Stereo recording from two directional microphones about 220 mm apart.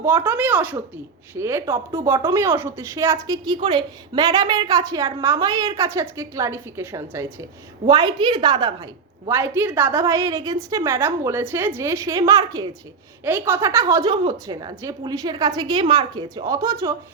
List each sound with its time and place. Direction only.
0.0 s a woman's voice: 10° right (ahead or behind)